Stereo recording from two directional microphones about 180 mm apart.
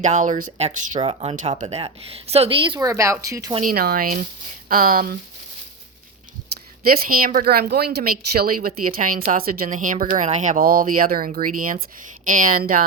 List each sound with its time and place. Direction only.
0.0 s speech: 45° right (ahead or behind)
0.9 s a woman's voice: 30° right (ahead or behind)
3.6 s speech: 55° right (ahead or behind)
6.8 s speech: 55° right (ahead or behind)